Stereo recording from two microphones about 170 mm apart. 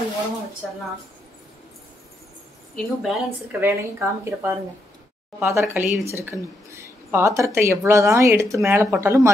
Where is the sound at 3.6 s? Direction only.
15° right (ahead or behind).